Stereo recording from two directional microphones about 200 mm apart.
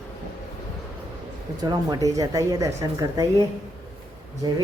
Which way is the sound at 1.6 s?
20° right (ahead or behind).